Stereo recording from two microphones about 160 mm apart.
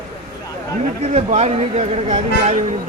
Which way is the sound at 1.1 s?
45° right (ahead or behind).